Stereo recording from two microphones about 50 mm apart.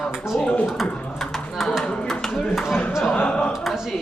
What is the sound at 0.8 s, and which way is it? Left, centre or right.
Typing, centre.